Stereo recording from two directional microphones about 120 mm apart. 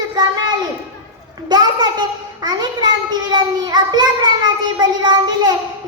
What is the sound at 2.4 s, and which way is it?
Child singing, 35° right (ahead or behind).